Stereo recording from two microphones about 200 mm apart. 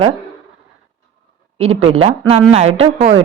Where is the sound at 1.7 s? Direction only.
90° right.